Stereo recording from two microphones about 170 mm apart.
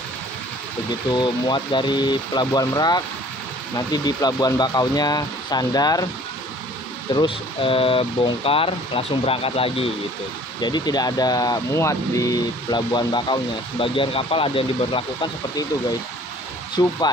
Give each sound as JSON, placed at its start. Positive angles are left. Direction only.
{"t": 1.1, "sound": "speech", "side_deg": 25}
{"t": 7.2, "sound": "speech", "side_deg": 30}
{"t": 16.8, "sound": "speech", "side_deg": 25}